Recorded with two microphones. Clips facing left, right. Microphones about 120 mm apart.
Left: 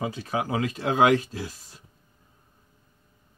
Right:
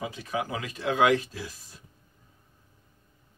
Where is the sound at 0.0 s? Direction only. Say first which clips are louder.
Left 3 dB; 35° left (ahead or behind).